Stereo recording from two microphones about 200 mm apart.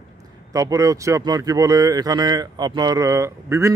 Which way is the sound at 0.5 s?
15° right (ahead or behind).